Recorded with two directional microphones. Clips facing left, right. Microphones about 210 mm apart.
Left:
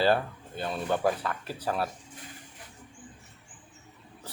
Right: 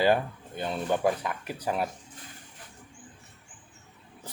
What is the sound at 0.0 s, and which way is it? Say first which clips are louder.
Speech: right 1 dB; 15° right (ahead or behind).